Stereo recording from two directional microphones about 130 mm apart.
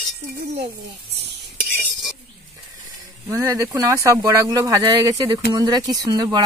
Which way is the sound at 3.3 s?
20° right (ahead or behind).